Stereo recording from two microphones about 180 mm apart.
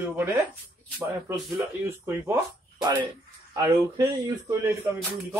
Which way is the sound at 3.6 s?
15° right (ahead or behind).